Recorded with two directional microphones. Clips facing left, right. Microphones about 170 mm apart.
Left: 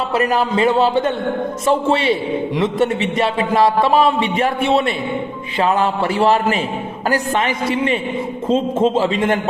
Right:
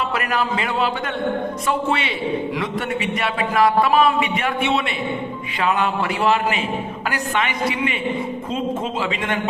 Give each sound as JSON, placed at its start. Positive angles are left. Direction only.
{"t": 0.1, "sound": "a man's voice", "side_deg": 30}